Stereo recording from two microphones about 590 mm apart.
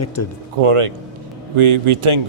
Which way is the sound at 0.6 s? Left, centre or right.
Right.